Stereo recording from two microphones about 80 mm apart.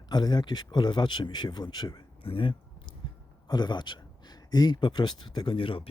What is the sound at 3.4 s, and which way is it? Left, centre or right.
Speech, left.